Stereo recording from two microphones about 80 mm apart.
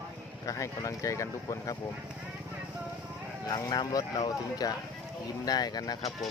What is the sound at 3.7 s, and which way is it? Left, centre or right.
Speech, left.